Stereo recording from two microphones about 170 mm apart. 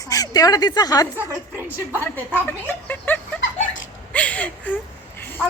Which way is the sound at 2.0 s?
10° left (ahead or behind).